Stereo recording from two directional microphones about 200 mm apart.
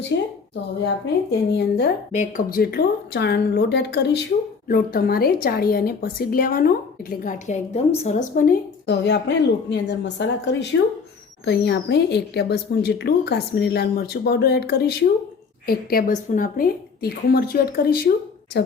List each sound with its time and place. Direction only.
0.1 s speech: 60° left (ahead or behind)
1.3 s speech: 55° left (ahead or behind)
2.1 s a woman's voice: 45° left (ahead or behind)